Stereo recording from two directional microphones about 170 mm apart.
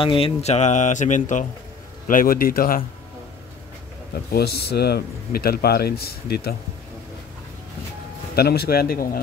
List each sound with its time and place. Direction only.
0.0 s speech: 30° left (ahead or behind); by 2.8 s 55° left (ahead or behind)
4.1 s speech: 70° left (ahead or behind)
8.4 s speech: 65° left (ahead or behind)